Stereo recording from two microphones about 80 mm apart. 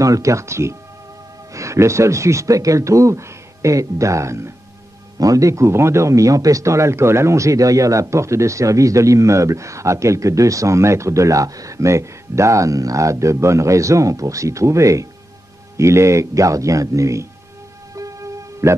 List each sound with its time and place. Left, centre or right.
0.0 s speech: right
17.9 s music: right